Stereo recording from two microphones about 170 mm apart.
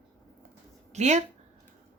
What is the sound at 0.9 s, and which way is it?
Speech, 40° right (ahead or behind).